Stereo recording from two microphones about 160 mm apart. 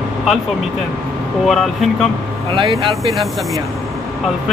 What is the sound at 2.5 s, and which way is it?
Speech, 35° right (ahead or behind).